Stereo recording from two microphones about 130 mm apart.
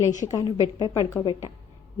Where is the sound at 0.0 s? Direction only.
25° left (ahead or behind).